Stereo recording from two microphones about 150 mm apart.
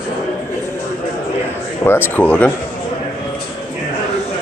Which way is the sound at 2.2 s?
10° left (ahead or behind).